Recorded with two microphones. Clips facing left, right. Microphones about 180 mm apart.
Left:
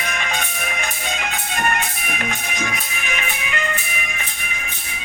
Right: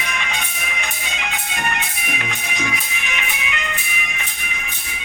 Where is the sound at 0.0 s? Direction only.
45° left (ahead or behind).